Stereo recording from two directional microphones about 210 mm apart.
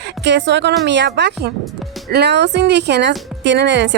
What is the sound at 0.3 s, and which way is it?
A woman's voice, 55° right (ahead or behind).